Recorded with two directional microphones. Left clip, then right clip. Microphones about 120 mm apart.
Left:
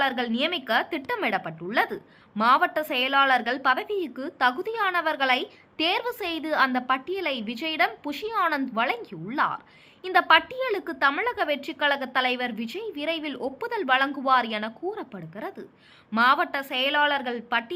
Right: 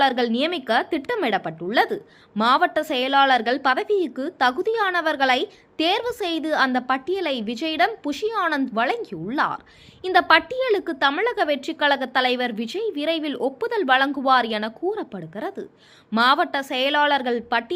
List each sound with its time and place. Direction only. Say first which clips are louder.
0.0 s a woman's voice: right 5 dB; 35° right (ahead or behind)